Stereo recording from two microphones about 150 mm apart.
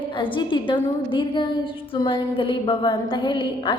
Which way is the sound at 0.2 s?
30° left (ahead or behind).